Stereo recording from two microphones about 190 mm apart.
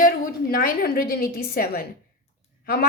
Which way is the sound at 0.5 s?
50° left (ahead or behind).